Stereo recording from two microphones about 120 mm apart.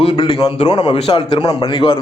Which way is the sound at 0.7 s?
35° left (ahead or behind).